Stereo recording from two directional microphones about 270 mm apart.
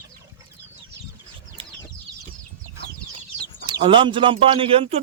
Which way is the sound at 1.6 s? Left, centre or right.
Right.